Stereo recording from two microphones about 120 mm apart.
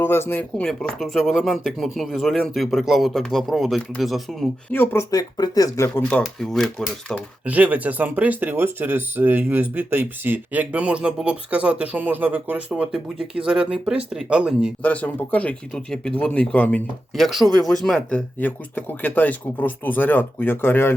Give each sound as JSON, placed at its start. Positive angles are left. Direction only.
{"t": 0.0, "sound": "speech", "side_deg": 20}
{"t": 0.7, "sound": "speech", "side_deg": 5}
{"t": 4.7, "sound": "speech", "side_deg": 20}
{"t": 5.1, "sound": "speech", "side_deg": 30}
{"t": 7.4, "sound": "speech", "side_deg": -10}
{"t": 14.8, "sound": "speech", "side_deg": 10}
{"t": 17.2, "sound": "speech", "side_deg": 0}
{"t": 18.3, "sound": "speech", "side_deg": 15}